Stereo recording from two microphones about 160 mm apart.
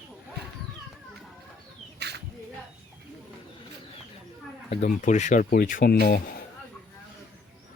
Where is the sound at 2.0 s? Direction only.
90° right.